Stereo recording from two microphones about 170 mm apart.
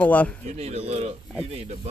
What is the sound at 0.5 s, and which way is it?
Speech, 35° right (ahead or behind).